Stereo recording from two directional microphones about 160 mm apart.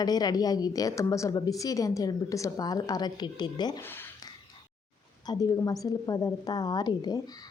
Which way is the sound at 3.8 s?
15° left (ahead or behind).